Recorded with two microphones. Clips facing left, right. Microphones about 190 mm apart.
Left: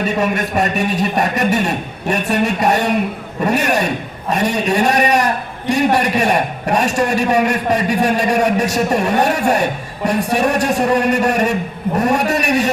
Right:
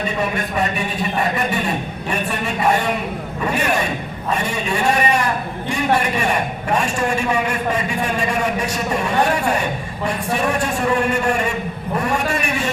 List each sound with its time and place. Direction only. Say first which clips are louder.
0.2 s a man's voice: left 2 dB; 40° left (ahead or behind)